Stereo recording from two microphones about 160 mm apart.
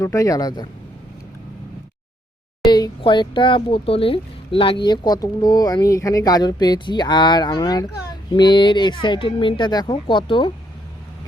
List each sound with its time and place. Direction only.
0.0 s speech: 20° left (ahead or behind)
2.6 s speech: 25° left (ahead or behind)